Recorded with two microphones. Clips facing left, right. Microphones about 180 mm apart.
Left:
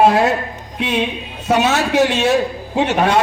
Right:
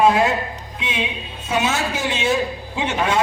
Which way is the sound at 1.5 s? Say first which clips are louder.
Left 6 dB; 70° left (ahead or behind).